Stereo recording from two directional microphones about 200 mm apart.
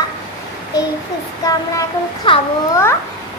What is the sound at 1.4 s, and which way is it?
A child's voice, 20° left (ahead or behind).